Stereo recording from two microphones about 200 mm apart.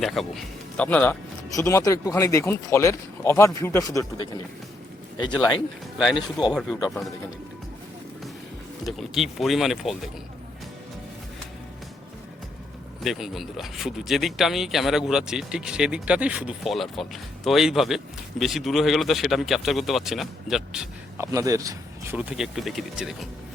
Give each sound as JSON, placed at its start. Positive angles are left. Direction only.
{"t": 0.0, "sound": "speech", "side_deg": 0}
{"t": 6.5, "sound": "speech", "side_deg": 0}
{"t": 9.0, "sound": "speech", "side_deg": 0}
{"t": 13.1, "sound": "speech", "side_deg": 0}
{"t": 21.2, "sound": "speech", "side_deg": -15}